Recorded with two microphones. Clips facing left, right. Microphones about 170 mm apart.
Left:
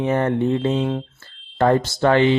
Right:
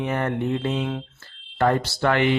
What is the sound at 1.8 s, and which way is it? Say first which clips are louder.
Speech: left 5 dB; 45° left (ahead or behind).